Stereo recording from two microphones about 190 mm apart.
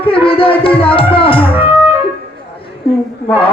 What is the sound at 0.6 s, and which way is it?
Music, 30° left (ahead or behind).